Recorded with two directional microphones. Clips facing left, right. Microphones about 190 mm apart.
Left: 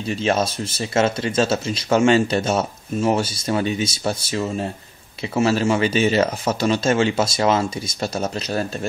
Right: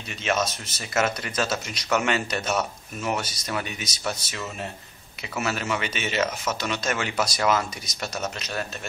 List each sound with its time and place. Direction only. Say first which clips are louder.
0.1 s speech: left 5 dB; 30° left (ahead or behind)